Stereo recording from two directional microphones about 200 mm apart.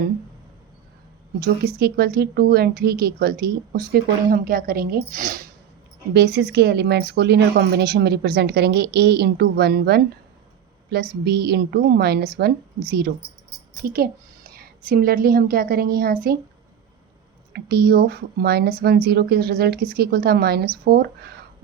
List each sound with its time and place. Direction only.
1.4 s a woman's voice: 50° right (ahead or behind)
13.8 s speech: 50° right (ahead or behind)
17.5 s speech: 55° right (ahead or behind)